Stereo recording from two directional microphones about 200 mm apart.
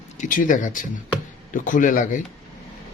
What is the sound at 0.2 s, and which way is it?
Speech, 40° left (ahead or behind).